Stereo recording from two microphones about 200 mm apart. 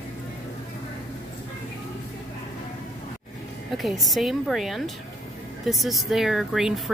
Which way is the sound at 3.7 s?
Centre (ahead or behind).